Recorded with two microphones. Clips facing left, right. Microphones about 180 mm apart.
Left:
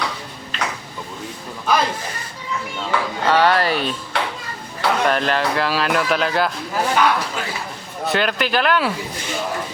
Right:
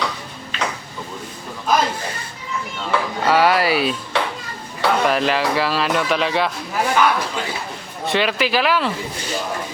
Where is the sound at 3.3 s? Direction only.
10° right (ahead or behind).